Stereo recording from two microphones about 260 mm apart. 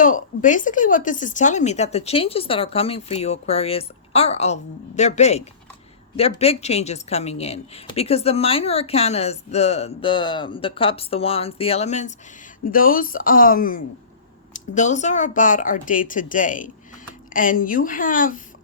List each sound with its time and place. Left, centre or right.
0.0 s a woman's voice: left